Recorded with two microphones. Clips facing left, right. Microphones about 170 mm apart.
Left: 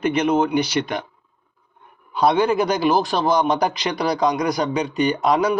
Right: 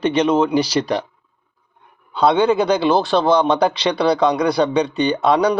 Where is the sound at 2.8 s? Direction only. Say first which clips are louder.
Right 3 dB; 30° right (ahead or behind).